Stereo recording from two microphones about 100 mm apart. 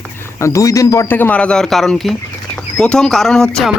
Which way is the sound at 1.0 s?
20° left (ahead or behind).